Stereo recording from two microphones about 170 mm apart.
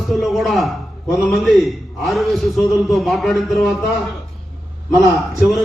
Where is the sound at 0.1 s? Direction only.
Centre (ahead or behind).